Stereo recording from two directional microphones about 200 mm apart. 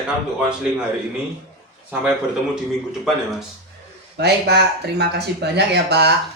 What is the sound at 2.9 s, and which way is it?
Speech, centre (ahead or behind).